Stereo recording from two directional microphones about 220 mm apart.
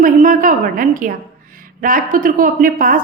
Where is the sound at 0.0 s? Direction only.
40° right (ahead or behind).